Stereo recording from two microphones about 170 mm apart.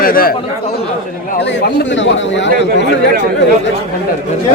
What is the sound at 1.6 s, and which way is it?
A man's voice, 90° left.